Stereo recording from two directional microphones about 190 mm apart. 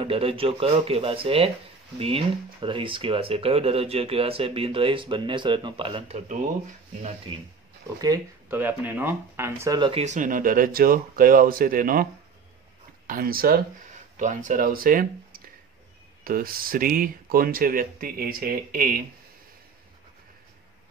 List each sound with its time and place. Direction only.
0.0 s speech: 30° right (ahead or behind)
8.0 s speech: 15° right (ahead or behind)
10.0 s speech: 40° right (ahead or behind)